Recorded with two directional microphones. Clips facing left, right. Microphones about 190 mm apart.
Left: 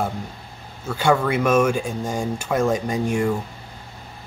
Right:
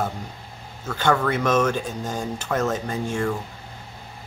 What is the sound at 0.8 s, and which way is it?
Speech, 10° left (ahead or behind).